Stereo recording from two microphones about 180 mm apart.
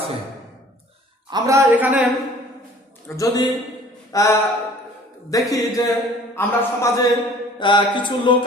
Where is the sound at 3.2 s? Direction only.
20° left (ahead or behind).